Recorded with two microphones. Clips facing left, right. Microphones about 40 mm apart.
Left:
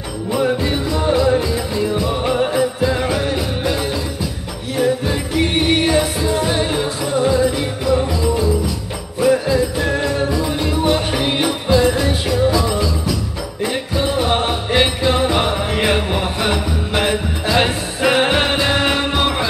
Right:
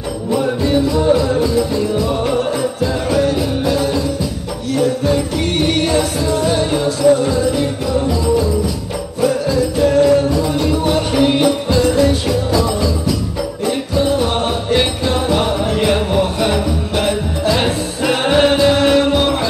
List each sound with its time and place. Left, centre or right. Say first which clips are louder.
0.3 s music: right 2 dB; centre
9.2 s music: left 1 dB; centre
10.5 s music: right 2 dB; centre